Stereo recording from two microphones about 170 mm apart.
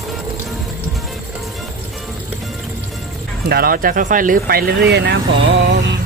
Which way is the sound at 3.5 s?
60° right (ahead or behind).